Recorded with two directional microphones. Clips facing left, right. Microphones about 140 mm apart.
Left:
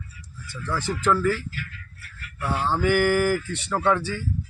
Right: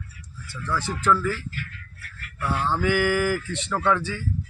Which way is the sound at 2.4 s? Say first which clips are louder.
Even; 35° left (ahead or behind).